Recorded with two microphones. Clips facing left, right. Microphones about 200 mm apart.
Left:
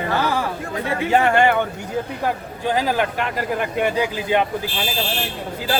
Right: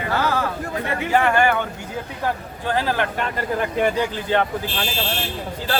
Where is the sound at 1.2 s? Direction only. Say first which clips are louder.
Left 2 dB; 25° left (ahead or behind).